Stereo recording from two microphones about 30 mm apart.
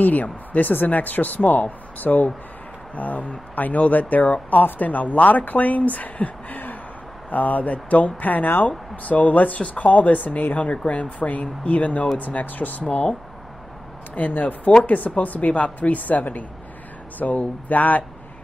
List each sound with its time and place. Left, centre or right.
0.0 s speech: left
12.2 s speech: left
14.1 s speech: left
14.9 s speech: left
17.2 s speech: left
17.6 s speech: left